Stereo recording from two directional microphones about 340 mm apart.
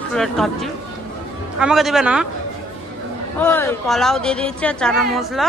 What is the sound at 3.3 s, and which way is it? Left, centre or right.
Speech, centre.